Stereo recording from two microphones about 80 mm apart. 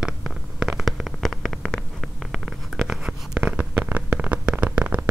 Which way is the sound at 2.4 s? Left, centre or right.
Centre.